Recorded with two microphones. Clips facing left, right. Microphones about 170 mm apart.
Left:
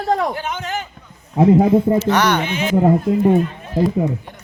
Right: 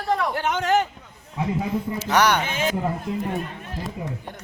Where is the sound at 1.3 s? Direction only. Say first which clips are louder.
Left 13 dB; 50° left (ahead or behind).